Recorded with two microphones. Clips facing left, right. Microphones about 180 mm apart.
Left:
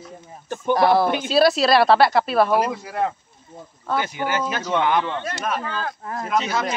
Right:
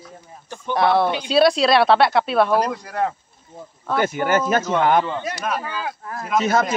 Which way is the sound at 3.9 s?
50° right (ahead or behind).